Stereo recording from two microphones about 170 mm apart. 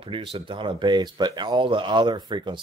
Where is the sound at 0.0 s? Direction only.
30° right (ahead or behind).